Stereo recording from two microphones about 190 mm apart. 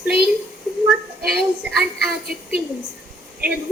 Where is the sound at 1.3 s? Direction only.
5° right (ahead or behind).